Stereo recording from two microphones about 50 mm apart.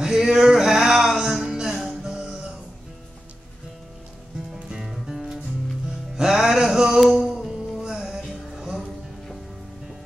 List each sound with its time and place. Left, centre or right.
0.0 s music: centre
4.6 s music: centre